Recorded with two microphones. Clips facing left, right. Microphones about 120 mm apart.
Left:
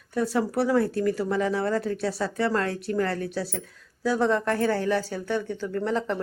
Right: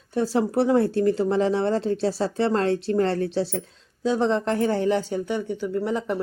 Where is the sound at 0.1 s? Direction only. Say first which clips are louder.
Right 3 dB; 25° right (ahead or behind).